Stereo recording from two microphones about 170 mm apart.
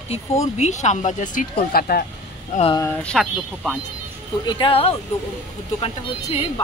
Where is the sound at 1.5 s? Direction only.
65° left (ahead or behind).